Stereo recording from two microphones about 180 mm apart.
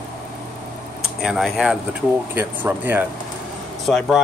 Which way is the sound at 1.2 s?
Centre (ahead or behind).